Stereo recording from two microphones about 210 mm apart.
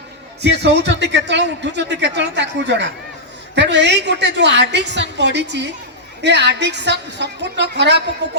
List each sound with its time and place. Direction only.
0.4 s speech: 55° right (ahead or behind)